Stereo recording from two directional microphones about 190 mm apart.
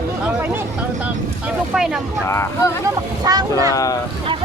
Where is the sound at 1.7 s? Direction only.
5° right (ahead or behind).